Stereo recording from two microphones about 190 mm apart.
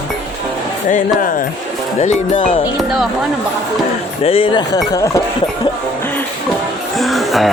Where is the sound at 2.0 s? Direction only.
40° left (ahead or behind).